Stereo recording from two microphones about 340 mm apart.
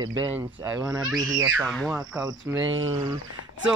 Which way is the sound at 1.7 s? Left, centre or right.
Centre.